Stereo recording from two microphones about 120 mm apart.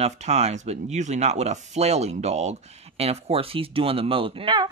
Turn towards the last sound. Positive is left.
turn(degrees=-45)  # may be behind; listen again after turning